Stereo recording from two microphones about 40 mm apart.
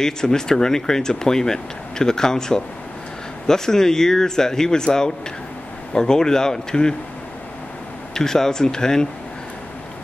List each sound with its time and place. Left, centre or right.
0.0 s speech: centre
8.1 s speech: centre